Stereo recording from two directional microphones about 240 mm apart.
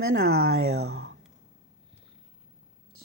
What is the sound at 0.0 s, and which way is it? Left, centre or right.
Speech, right.